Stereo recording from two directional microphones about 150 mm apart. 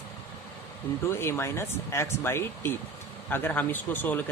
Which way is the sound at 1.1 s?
15° left (ahead or behind).